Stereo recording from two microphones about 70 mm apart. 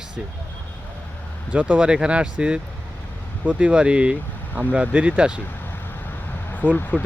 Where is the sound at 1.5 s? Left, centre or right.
Right.